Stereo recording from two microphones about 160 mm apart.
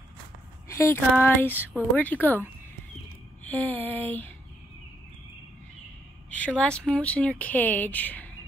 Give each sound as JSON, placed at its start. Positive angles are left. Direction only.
{"t": 0.7, "sound": "a sound", "side_deg": 20}
{"t": 1.2, "sound": "speech", "side_deg": 15}
{"t": 3.4, "sound": "speech", "side_deg": 10}
{"t": 6.3, "sound": "speech", "side_deg": 5}